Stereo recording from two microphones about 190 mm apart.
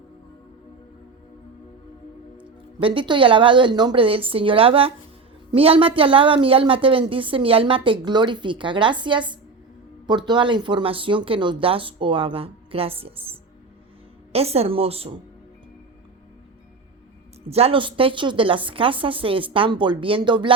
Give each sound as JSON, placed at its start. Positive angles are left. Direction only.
{"t": 2.8, "sound": "a woman's voice", "side_deg": -25}
{"t": 14.3, "sound": "a woman's voice", "side_deg": -30}
{"t": 17.5, "sound": "a woman's voice", "side_deg": -30}